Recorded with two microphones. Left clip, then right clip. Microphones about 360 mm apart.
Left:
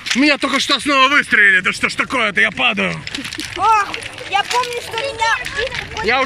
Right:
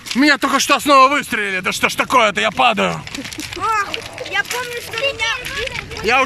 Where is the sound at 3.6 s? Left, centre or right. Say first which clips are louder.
Left 5 dB; centre.